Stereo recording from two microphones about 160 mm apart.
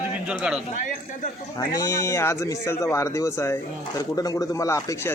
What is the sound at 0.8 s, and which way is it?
Speech, 55° left (ahead or behind).